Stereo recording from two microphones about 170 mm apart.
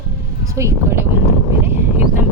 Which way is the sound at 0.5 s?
15° right (ahead or behind).